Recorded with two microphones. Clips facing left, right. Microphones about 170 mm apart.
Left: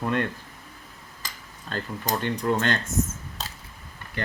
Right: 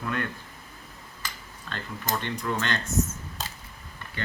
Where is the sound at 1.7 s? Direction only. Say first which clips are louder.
Left 3 dB; 40° left (ahead or behind).